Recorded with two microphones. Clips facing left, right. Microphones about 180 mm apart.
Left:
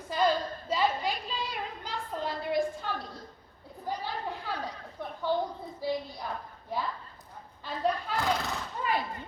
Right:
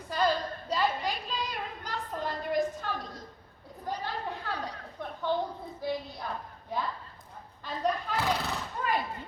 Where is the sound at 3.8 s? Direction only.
10° left (ahead or behind).